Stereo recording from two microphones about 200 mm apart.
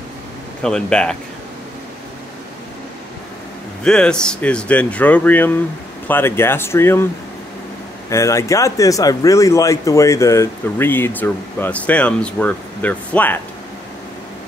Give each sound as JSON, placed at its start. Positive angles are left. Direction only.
{"t": 0.6, "sound": "speech", "side_deg": 5}
{"t": 3.8, "sound": "speech", "side_deg": 5}
{"t": 8.1, "sound": "speech", "side_deg": 15}